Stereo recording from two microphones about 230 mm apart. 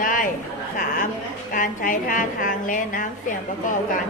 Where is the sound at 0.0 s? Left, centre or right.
Left.